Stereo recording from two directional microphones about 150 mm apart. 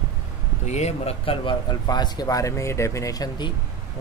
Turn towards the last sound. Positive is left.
turn(degrees=25)  # may be behind; listen again after turning